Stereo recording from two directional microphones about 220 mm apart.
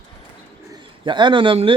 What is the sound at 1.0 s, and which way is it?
Speech, 20° right (ahead or behind).